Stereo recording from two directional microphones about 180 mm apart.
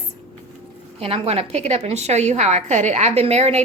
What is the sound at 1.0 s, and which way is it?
A woman's voice, 30° right (ahead or behind).